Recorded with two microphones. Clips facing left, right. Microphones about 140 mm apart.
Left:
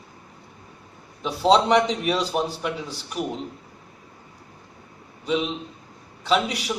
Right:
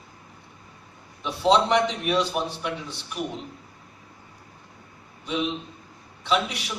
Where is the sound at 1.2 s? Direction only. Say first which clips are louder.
Left 2 dB; 35° left (ahead or behind).